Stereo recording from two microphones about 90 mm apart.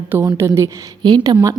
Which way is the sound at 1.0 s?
55° right (ahead or behind).